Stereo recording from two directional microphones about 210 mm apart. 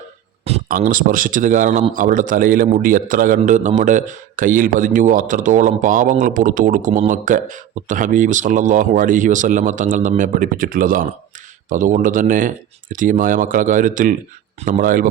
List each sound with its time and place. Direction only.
0.4 s speech: 35° right (ahead or behind)